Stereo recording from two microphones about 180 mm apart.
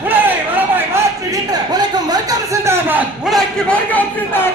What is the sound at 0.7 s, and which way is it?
Speech, 15° right (ahead or behind).